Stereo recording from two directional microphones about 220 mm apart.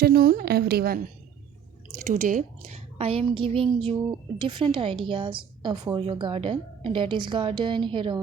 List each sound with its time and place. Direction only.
0.0 s a woman's voice: 45° right (ahead or behind)
2.0 s a woman's voice: 35° right (ahead or behind); by 8.2 s 20° right (ahead or behind)